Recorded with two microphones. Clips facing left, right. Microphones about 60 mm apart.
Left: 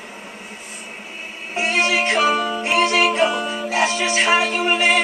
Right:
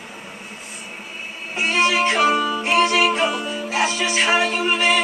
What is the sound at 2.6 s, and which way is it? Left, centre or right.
Music, centre.